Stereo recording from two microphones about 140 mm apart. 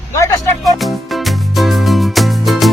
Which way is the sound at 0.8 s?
Centre (ahead or behind).